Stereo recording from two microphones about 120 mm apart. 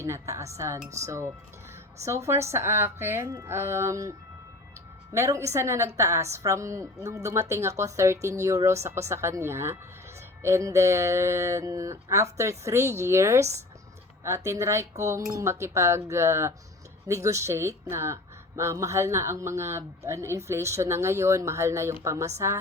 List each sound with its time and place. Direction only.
0.0 s speech: 25° right (ahead or behind)
5.1 s speech: 25° right (ahead or behind)